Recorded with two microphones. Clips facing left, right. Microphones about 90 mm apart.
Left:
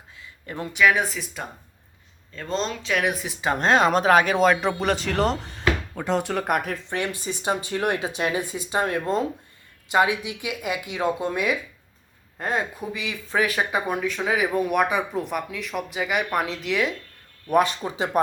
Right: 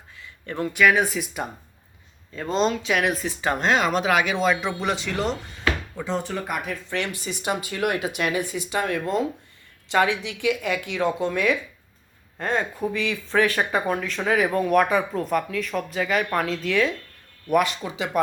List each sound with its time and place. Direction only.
0.8 s speech: centre (ahead or behind)
3.1 s speech: 10° left (ahead or behind)
3.6 s speech: 40° left (ahead or behind)
6.0 s speech: 75° left (ahead or behind)
7.3 s speech: 30° left (ahead or behind)
9.9 s speech: 15° left (ahead or behind)
17.5 s speech: 30° left (ahead or behind)